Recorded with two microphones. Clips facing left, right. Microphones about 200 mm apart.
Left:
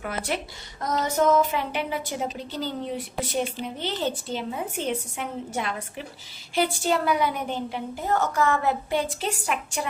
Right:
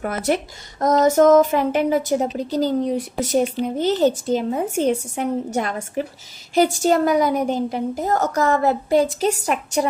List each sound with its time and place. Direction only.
0.0 s a woman's voice: 45° right (ahead or behind)